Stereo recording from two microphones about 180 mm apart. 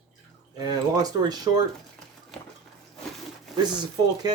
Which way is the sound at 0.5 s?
20° right (ahead or behind).